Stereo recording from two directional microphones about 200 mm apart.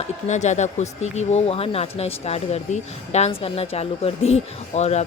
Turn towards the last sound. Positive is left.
turn(degrees=35)  # may be behind; listen again after turning